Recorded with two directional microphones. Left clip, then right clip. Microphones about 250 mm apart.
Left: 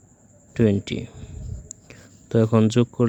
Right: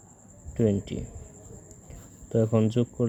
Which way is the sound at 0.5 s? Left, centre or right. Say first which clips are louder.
Left 5 dB; left.